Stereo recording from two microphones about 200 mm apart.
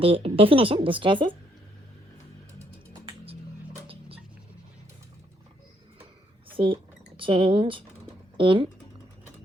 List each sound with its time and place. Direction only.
0.0 s speech: 30° right (ahead or behind)
6.5 s a sound: 25° right (ahead or behind)
7.2 s speech: 25° right (ahead or behind)